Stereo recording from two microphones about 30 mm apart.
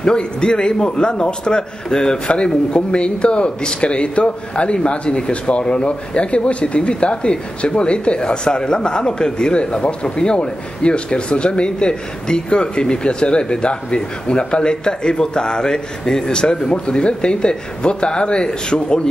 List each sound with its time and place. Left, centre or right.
0.0 s a man's voice: left
2.2 s speech: left